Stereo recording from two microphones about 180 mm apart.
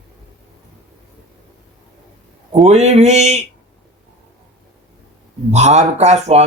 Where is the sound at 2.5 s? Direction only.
40° right (ahead or behind).